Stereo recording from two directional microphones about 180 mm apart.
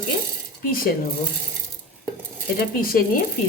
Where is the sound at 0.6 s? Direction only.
55° left (ahead or behind).